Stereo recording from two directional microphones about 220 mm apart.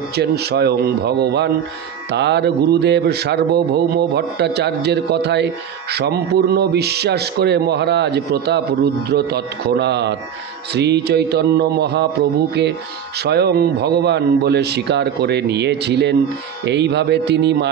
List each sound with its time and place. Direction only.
0.1 s speech: 50° right (ahead or behind)
13.2 s speech: 45° right (ahead or behind)